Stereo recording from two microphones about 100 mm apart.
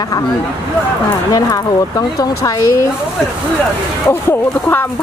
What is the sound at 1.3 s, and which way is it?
Speech, 40° left (ahead or behind).